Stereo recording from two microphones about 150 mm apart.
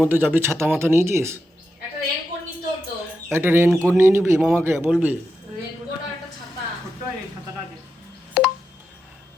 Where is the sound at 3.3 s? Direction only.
15° right (ahead or behind).